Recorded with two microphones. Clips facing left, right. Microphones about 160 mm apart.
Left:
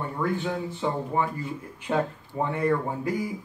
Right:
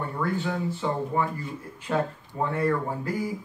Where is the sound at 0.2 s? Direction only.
15° left (ahead or behind).